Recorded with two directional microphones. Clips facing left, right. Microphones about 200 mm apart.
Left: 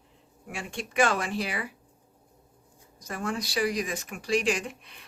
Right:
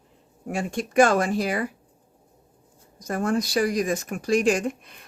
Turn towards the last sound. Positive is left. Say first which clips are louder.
# right 8 dB
turn(degrees=-45)  # may be behind; listen again after turning